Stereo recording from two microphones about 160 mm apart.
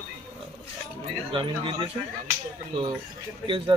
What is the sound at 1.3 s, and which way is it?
Speech, 35° right (ahead or behind).